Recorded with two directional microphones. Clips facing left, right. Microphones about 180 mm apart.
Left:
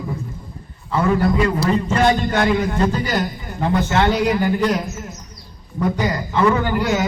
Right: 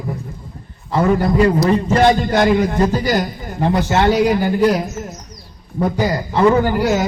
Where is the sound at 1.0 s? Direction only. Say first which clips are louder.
Right 3 dB; 40° right (ahead or behind).